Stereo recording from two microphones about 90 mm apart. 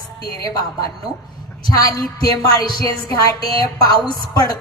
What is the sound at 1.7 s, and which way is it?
A woman's voice, 45° left (ahead or behind).